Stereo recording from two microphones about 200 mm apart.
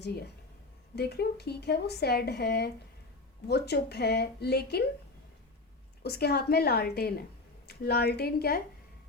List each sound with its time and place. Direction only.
0.9 s a woman's voice: 55° left (ahead or behind)
6.0 s speech: 55° left (ahead or behind)